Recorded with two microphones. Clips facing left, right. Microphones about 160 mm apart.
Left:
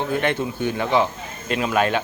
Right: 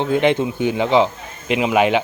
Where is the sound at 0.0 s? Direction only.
15° right (ahead or behind).